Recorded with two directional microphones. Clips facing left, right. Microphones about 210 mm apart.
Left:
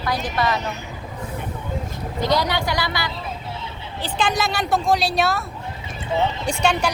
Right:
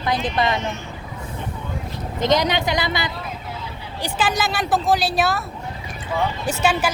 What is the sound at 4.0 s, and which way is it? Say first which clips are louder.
Speech: even; 5° right (ahead or behind).